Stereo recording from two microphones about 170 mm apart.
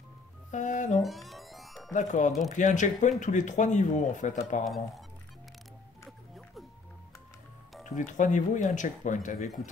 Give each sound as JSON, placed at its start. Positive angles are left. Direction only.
{"t": 0.5, "sound": "speech", "side_deg": 45}
{"t": 1.0, "sound": "music", "side_deg": 0}
{"t": 1.9, "sound": "speech", "side_deg": 45}
{"t": 4.6, "sound": "speech", "side_deg": 0}
{"t": 6.0, "sound": "music", "side_deg": 0}
{"t": 7.8, "sound": "speech", "side_deg": 50}